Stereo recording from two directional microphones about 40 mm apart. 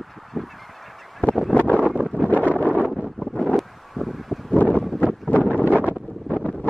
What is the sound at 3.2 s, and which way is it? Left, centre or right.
Wind noise, centre.